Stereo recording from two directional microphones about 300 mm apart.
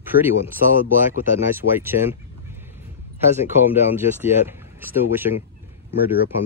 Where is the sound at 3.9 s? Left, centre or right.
Centre.